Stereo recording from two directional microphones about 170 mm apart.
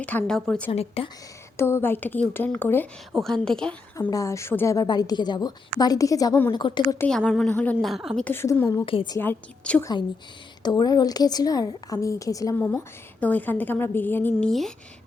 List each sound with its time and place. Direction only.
0.0 s a woman's voice: 10° left (ahead or behind)
0.7 s speech: 35° left (ahead or behind)
1.5 s a woman's voice: 15° left (ahead or behind)
3.1 s a woman's voice: centre (ahead or behind)
3.9 s a woman's voice: 20° left (ahead or behind)
7.0 s a woman's voice: 5° left (ahead or behind)
8.2 s a woman's voice: 15° left (ahead or behind)
8.7 s a woman's voice: 25° left (ahead or behind)
9.1 s a woman's voice: 10° left (ahead or behind)
10.6 s a woman's voice: 25° left (ahead or behind)